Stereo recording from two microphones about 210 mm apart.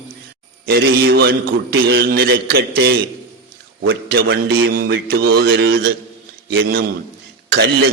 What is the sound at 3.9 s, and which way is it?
A man's voice, 45° right (ahead or behind).